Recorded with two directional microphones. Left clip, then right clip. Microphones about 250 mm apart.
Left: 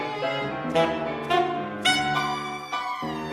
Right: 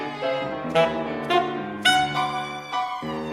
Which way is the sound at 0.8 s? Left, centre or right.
Right.